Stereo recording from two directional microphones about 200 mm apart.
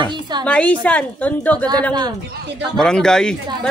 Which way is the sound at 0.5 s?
5° left (ahead or behind).